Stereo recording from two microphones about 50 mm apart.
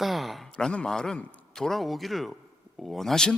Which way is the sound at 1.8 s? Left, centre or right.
Centre.